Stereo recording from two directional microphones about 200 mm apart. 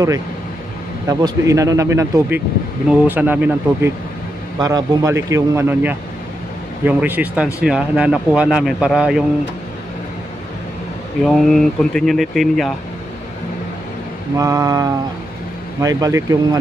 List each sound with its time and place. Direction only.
1.0 s a man's voice: 15° right (ahead or behind)
11.2 s a man's voice: centre (ahead or behind)
14.3 s speech: 15° right (ahead or behind)